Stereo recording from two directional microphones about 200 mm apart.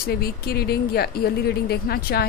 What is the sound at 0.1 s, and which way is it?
A woman's voice, 50° left (ahead or behind).